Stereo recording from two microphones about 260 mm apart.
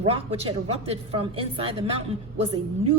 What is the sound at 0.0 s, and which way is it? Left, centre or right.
A woman's voice, right.